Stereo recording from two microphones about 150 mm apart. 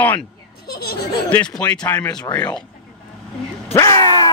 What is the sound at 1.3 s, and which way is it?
Speech, 10° left (ahead or behind).